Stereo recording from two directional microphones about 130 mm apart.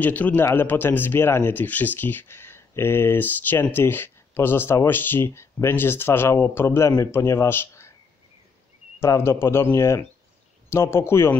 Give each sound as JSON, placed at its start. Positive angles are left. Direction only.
{"t": 0.0, "sound": "a man's voice", "side_deg": 10}
{"t": 9.0, "sound": "speech", "side_deg": 20}